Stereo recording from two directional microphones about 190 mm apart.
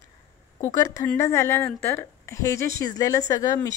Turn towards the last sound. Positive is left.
turn(degrees=20)  # may be behind; listen again after turning